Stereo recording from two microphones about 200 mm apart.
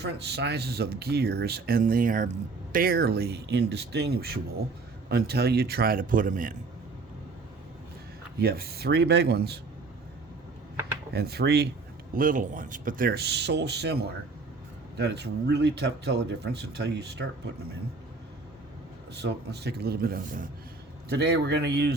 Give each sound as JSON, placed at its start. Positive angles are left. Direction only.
{"t": 0.0, "sound": "speech", "side_deg": -55}
{"t": 8.4, "sound": "speech", "side_deg": -50}
{"t": 11.1, "sound": "speech", "side_deg": -55}
{"t": 12.1, "sound": "a man's voice", "side_deg": -40}
{"t": 19.1, "sound": "a man's voice", "side_deg": -55}